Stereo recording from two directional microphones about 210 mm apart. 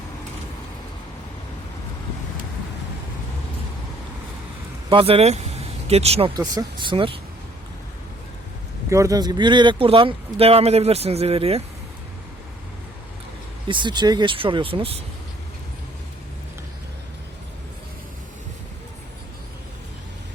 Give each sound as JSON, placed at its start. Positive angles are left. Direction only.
{"t": 4.9, "sound": "speech", "side_deg": -25}
{"t": 8.9, "sound": "speech", "side_deg": -15}
{"t": 13.7, "sound": "speech", "side_deg": -20}